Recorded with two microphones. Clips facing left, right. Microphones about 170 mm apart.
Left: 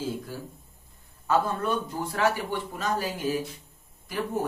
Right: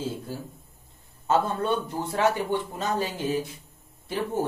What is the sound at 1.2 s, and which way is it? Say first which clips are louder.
Speech: right 1 dB; 25° right (ahead or behind).